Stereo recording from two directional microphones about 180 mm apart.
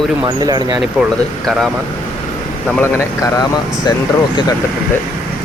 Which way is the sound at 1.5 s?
Centre (ahead or behind).